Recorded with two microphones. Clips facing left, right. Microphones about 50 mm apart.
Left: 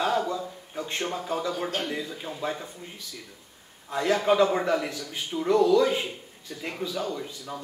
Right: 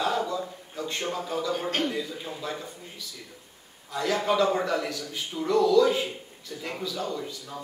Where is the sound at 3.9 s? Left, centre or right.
Left.